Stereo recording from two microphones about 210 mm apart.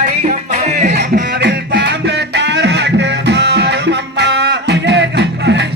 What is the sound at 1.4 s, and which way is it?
Music, 55° right (ahead or behind).